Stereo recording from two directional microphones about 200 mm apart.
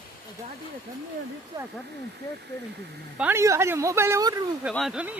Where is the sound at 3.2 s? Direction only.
10° right (ahead or behind).